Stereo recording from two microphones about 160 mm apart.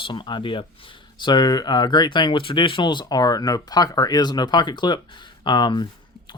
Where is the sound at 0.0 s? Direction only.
30° left (ahead or behind).